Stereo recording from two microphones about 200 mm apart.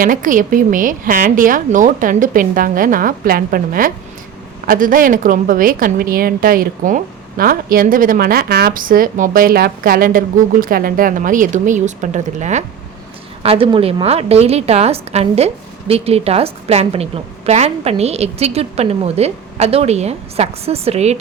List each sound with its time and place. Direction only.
0.0 s a woman's voice: 40° right (ahead or behind)